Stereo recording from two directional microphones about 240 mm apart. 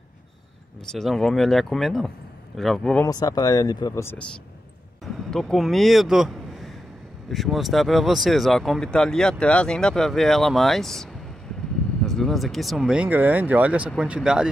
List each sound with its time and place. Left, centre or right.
0.9 s speech: centre
3.1 s speech: centre